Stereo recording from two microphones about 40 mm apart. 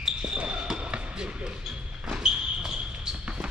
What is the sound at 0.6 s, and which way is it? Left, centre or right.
Basketball bounce, right.